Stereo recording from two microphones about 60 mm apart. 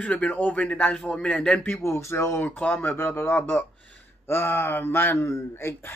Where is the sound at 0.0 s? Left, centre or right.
Left.